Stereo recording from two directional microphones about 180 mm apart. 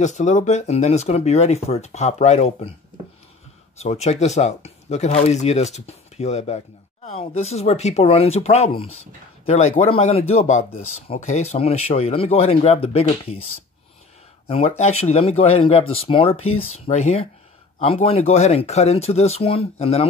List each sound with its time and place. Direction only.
0.0 s speech: 40° left (ahead or behind)
3.7 s speech: 35° left (ahead or behind)
14.5 s speech: 35° left (ahead or behind)